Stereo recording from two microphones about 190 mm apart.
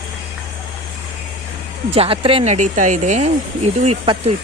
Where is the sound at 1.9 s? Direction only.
30° right (ahead or behind).